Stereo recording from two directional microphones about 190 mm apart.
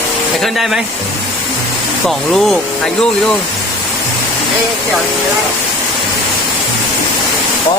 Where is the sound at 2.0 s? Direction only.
Centre (ahead or behind).